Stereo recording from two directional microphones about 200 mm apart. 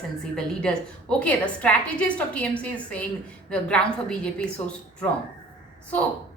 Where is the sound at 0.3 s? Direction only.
5° left (ahead or behind).